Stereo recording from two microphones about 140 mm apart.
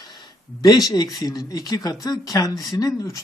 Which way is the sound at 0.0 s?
30° left (ahead or behind).